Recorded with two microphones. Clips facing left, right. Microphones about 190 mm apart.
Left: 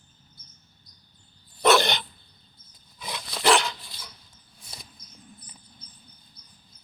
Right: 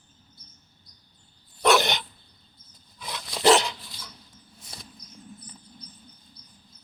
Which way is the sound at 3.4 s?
30° right (ahead or behind).